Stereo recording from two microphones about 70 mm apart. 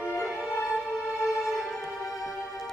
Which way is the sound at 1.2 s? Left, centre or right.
Centre.